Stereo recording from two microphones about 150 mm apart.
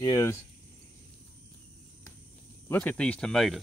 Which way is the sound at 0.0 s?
20° left (ahead or behind).